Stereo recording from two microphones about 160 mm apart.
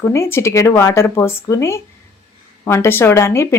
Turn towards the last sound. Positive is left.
turn(degrees=15)  # may be behind; listen again after turning